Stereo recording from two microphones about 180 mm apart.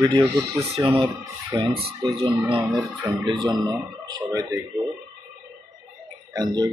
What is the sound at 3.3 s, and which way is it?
Speech, 25° right (ahead or behind).